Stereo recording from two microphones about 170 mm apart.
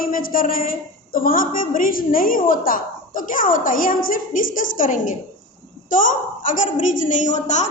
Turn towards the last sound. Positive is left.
turn(degrees=45)  # may be behind; listen again after turning